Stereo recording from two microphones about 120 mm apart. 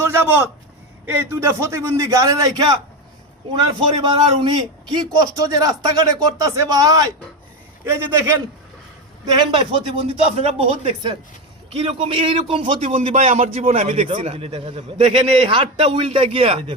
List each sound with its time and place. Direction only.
0.0 s a man's voice: 20° right (ahead or behind)
9.3 s a man's voice: 45° right (ahead or behind)
13.1 s a man's voice: 70° right (ahead or behind); by 16.7 s 50° right (ahead or behind)